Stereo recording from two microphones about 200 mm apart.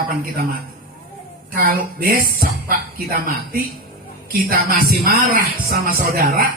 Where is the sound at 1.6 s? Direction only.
45° right (ahead or behind).